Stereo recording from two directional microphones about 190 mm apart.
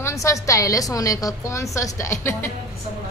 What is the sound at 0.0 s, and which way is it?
A woman's voice, 15° left (ahead or behind).